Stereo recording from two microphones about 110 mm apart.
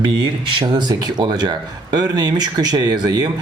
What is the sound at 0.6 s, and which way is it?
Speech, 40° right (ahead or behind).